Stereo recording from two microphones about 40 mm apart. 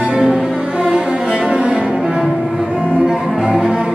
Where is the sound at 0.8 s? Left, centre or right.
Right.